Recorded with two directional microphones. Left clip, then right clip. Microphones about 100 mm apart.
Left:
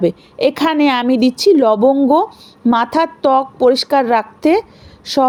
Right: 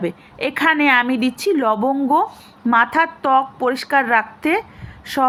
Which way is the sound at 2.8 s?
45° left (ahead or behind).